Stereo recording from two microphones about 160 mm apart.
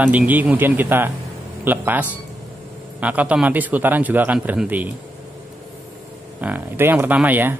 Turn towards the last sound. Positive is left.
turn(degrees=-10)  # may be behind; listen again after turning